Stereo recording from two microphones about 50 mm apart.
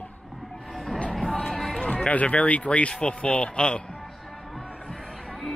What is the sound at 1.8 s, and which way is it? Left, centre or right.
Music, centre.